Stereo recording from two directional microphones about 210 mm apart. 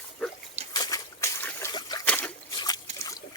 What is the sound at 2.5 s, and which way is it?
Trickle, 20° left (ahead or behind).